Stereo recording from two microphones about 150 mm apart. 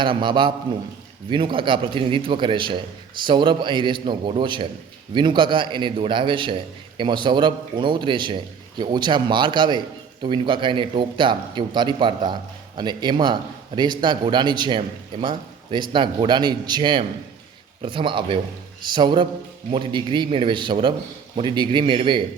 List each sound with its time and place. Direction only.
0.0 s a man's voice: 35° right (ahead or behind)